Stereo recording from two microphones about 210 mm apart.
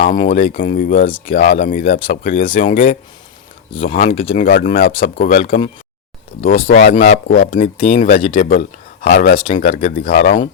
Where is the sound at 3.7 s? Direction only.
25° left (ahead or behind).